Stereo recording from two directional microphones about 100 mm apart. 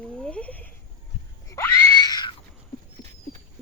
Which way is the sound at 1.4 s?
30° left (ahead or behind).